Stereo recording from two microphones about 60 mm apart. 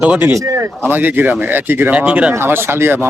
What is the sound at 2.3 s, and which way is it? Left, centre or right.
Speech, right.